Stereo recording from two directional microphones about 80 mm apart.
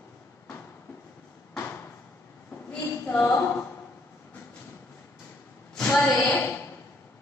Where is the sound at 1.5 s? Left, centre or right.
Left.